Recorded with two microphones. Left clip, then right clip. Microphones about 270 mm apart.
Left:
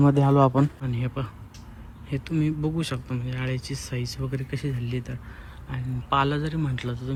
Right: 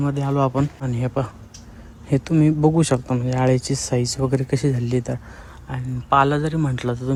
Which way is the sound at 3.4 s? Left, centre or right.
Right.